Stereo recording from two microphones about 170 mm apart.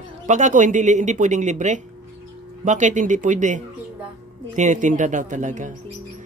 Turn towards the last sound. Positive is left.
turn(degrees=-45)  # may be behind; listen again after turning